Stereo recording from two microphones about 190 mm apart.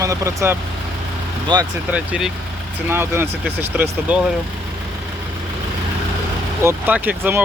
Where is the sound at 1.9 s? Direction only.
5° right (ahead or behind).